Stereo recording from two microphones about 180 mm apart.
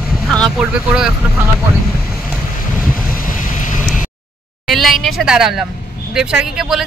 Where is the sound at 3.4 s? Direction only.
45° left (ahead or behind).